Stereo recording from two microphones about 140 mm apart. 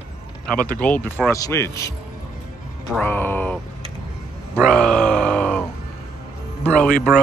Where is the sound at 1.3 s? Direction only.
20° left (ahead or behind).